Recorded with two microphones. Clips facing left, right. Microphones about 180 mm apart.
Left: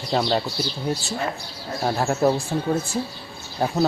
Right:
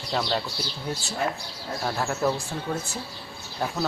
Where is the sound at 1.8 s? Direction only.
35° left (ahead or behind).